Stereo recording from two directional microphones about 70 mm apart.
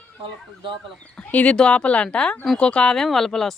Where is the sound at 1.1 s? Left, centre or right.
Centre.